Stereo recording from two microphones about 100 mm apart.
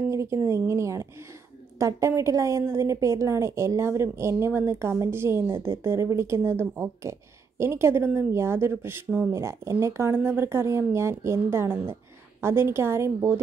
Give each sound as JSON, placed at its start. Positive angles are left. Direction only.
{"t": 0.1, "sound": "a woman's voice", "side_deg": -30}